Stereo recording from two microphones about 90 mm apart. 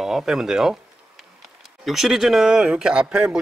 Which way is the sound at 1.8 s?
5° right (ahead or behind).